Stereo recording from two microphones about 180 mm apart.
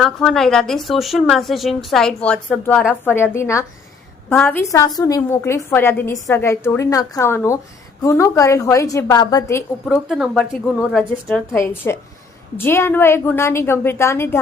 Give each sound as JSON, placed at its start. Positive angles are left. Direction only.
{"t": 0.0, "sound": "a woman's voice", "side_deg": 0}
{"t": 9.8, "sound": "speech", "side_deg": 0}
{"t": 11.5, "sound": "a woman's voice", "side_deg": 15}